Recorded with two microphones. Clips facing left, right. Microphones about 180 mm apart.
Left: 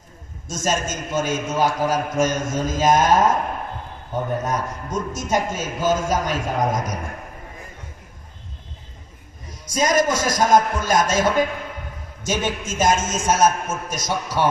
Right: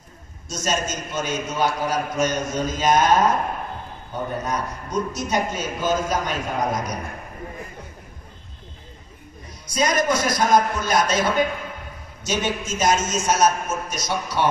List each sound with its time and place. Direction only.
0.5 s a man's voice: 50° left (ahead or behind)
4.4 s a man's voice: 45° left (ahead or behind)
9.8 s a man's voice: 45° left (ahead or behind)